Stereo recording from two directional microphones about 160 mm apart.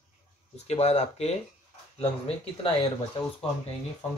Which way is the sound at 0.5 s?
40° left (ahead or behind).